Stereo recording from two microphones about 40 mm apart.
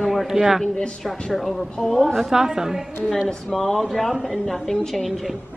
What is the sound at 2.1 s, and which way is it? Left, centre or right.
Speech, centre.